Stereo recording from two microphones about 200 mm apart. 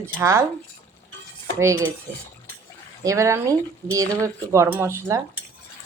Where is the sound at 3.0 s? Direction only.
15° right (ahead or behind).